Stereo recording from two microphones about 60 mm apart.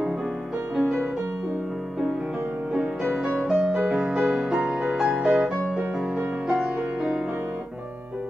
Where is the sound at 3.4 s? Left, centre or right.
Centre.